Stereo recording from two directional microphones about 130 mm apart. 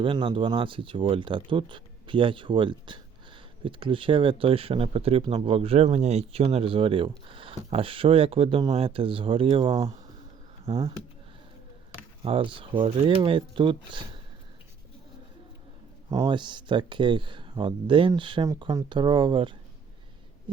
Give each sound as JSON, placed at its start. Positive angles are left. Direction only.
{"t": 0.0, "sound": "speech", "side_deg": -40}
{"t": 12.2, "sound": "speech", "side_deg": -45}
{"t": 16.2, "sound": "speech", "side_deg": -35}